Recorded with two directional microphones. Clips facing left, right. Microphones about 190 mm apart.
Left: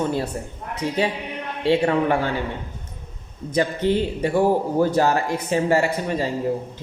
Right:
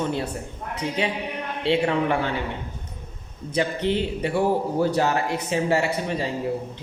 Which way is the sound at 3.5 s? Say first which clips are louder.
Left 3 dB; 45° left (ahead or behind).